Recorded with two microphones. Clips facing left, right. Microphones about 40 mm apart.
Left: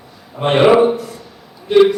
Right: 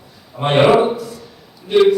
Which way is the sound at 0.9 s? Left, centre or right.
Left.